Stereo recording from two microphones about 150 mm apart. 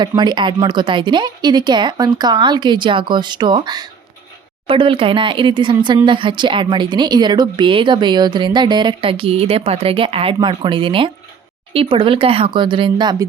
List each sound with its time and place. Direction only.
0.0 s a woman's voice: 30° right (ahead or behind)